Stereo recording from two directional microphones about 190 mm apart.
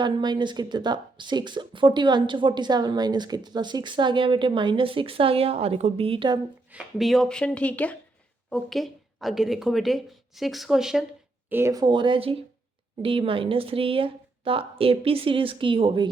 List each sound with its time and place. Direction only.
0.0 s speech: 25° right (ahead or behind)
6.7 s speech: 5° right (ahead or behind)
11.4 s speech: 10° right (ahead or behind); by 16.0 s 30° right (ahead or behind)